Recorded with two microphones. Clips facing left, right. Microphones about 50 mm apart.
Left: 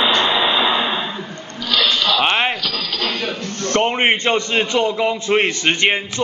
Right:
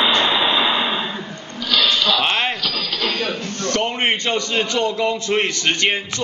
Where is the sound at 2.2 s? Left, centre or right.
Centre.